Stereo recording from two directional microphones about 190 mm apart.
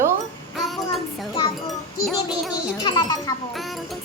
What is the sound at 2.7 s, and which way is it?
Speech, 20° left (ahead or behind).